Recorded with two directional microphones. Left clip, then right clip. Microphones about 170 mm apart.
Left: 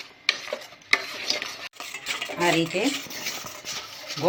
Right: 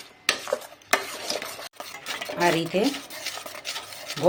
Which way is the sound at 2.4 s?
45° right (ahead or behind).